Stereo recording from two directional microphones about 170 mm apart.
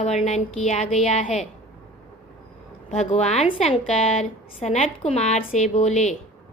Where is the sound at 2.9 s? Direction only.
40° left (ahead or behind).